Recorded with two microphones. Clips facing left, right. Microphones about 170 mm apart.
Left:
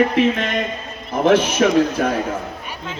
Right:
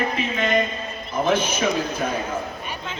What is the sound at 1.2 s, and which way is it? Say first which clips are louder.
Speech: left 7 dB; 75° left (ahead or behind).